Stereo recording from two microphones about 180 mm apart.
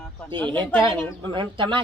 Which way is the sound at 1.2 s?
25° right (ahead or behind).